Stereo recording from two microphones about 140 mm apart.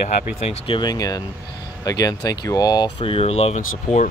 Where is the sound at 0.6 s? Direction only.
35° left (ahead or behind); by 4.0 s 55° left (ahead or behind).